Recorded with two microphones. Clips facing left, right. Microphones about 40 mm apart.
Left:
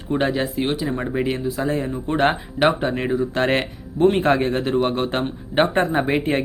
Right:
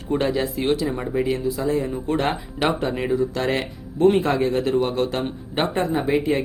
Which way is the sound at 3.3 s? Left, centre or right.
Left.